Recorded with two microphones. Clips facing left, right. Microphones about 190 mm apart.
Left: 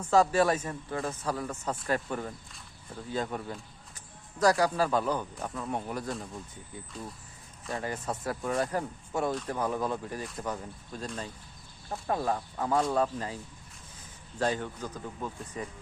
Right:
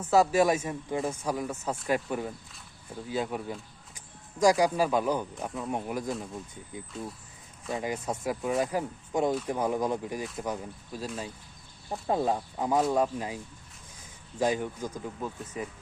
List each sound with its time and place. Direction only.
0.0 s speech: 10° right (ahead or behind)
11.9 s speech: 20° right (ahead or behind)